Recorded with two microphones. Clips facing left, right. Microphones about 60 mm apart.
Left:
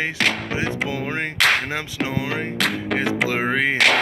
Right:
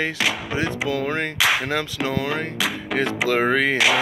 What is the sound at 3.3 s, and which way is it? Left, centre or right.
Speech, centre.